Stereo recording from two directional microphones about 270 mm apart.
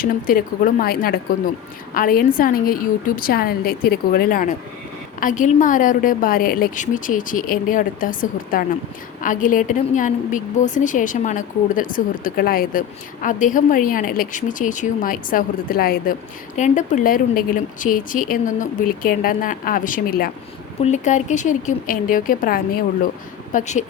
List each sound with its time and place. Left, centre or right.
0.0 s a woman's voice: left